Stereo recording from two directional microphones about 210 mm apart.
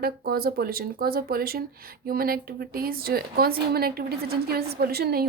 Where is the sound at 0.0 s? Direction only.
45° right (ahead or behind).